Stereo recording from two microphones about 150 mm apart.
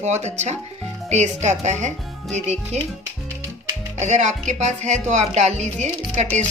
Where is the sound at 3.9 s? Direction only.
50° right (ahead or behind).